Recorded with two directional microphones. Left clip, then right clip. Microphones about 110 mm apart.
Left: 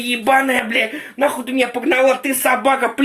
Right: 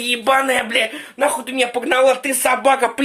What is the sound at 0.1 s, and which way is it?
Speech, 25° right (ahead or behind).